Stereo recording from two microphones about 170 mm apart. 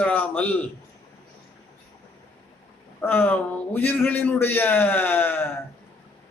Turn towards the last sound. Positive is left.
turn(degrees=10)  # may be behind; listen again after turning